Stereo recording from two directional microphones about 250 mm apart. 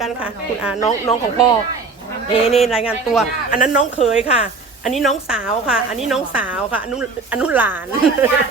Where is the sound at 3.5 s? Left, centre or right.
Left.